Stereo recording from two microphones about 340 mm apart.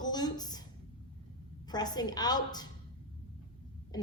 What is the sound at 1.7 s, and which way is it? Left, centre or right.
Speech, centre.